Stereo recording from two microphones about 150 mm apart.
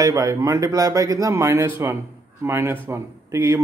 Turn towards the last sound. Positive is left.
turn(degrees=-20)  # may be behind; listen again after turning